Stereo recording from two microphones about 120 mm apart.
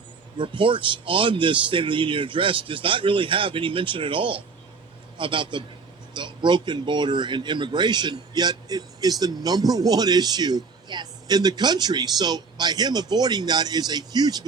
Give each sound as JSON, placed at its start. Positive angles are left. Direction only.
{"t": 0.3, "sound": "a man's voice", "side_deg": -45}